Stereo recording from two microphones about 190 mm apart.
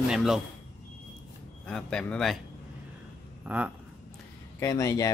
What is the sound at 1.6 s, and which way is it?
Speech, 5° left (ahead or behind).